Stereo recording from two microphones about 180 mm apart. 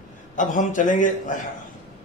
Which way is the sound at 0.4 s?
45° left (ahead or behind).